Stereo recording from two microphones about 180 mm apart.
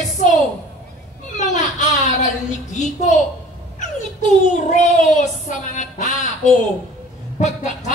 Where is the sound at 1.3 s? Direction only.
40° left (ahead or behind).